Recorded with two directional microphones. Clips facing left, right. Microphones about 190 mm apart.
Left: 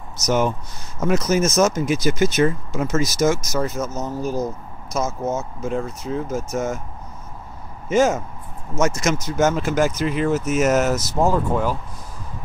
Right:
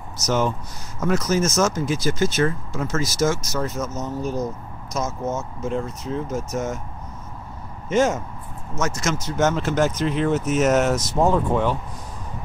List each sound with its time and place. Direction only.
0.2 s speech: 15° left (ahead or behind)
3.4 s speech: 10° left (ahead or behind)
5.6 s speech: 5° left (ahead or behind)
7.9 s speech: 5° left (ahead or behind)
8.7 s speech: 20° left (ahead or behind); by 11.7 s 5° left (ahead or behind)